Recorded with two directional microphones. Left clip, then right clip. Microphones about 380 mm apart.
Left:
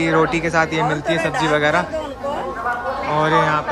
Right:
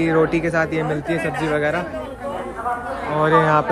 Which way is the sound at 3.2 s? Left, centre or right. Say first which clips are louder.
Right 2 dB; centre.